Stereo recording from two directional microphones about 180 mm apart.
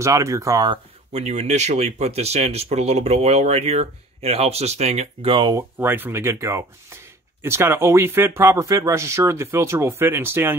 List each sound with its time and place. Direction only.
0.0 s speech: 15° right (ahead or behind)
1.1 s speech: 40° right (ahead or behind)
5.6 s speech: 10° right (ahead or behind)